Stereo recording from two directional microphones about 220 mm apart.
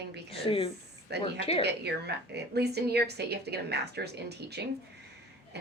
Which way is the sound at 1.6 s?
50° right (ahead or behind).